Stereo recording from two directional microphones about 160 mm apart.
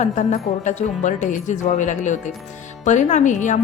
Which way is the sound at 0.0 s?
45° left (ahead or behind).